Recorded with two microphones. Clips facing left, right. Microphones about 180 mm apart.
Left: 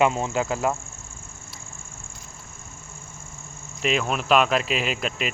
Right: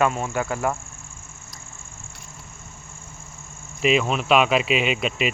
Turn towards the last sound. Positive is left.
turn(degrees=0)  # may be behind; listen again after turning